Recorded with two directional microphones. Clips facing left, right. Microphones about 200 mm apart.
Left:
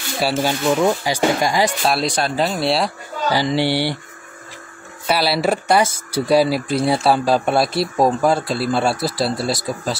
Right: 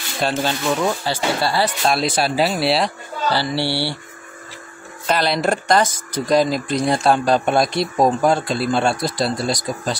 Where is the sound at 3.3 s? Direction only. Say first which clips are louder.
Left 3 dB; 15° left (ahead or behind).